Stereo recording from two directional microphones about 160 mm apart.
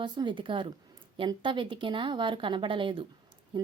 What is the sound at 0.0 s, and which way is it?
Speech, 30° right (ahead or behind).